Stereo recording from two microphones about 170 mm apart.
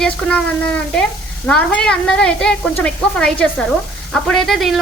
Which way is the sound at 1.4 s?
5° left (ahead or behind).